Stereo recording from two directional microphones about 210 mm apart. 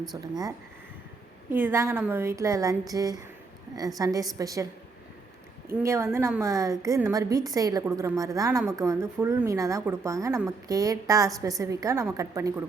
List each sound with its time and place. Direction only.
0.2 s speech: 20° right (ahead or behind)
5.7 s speech: 15° right (ahead or behind)